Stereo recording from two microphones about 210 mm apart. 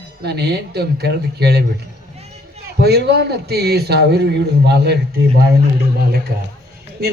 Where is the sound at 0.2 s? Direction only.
50° right (ahead or behind).